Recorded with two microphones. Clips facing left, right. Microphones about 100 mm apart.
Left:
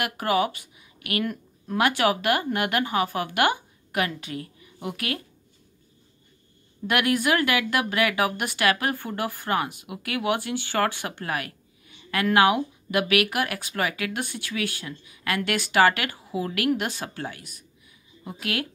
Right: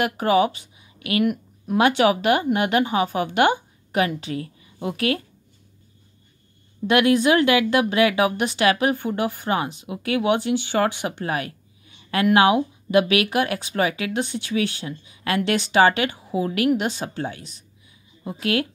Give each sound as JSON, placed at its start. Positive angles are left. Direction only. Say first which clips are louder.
{"t": 0.0, "sound": "speech", "louder": "right 5 dB", "side_deg": -25}
{"t": 6.9, "sound": "speech", "louder": "right 6 dB", "side_deg": -25}